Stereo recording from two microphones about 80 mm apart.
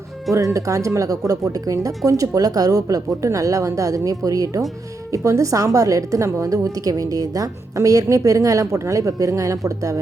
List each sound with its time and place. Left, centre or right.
0.3 s a woman's voice: right